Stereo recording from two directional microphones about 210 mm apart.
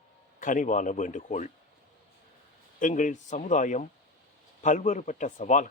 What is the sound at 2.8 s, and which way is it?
Speech, 35° left (ahead or behind).